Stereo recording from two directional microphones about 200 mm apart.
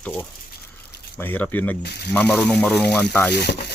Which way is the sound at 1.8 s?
55° left (ahead or behind).